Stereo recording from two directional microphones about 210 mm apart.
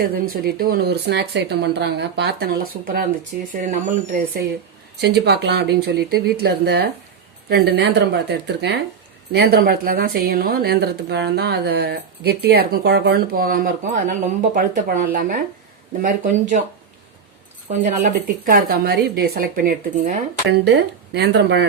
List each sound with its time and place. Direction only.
0.0 s a woman's voice: 45° right (ahead or behind)
4.9 s a woman's voice: 50° right (ahead or behind)
17.8 s a woman's voice: 40° right (ahead or behind); by 21.7 s 55° right (ahead or behind)